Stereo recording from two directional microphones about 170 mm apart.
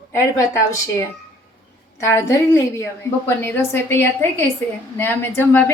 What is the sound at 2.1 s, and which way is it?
A woman's voice, 20° left (ahead or behind).